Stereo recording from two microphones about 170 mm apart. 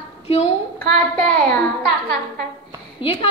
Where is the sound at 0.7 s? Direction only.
5° left (ahead or behind).